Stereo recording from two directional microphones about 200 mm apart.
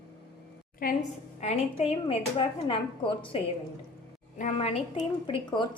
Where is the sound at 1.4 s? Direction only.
30° left (ahead or behind).